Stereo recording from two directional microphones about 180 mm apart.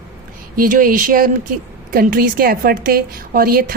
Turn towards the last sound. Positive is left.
turn(degrees=-55)  # may be behind; listen again after turning